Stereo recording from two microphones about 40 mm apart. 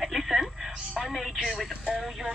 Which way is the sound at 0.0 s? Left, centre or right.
Centre.